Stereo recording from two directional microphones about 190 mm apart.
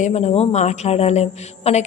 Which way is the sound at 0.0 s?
35° left (ahead or behind).